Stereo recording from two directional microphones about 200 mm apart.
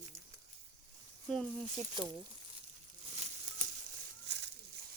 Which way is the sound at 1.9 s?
25° right (ahead or behind).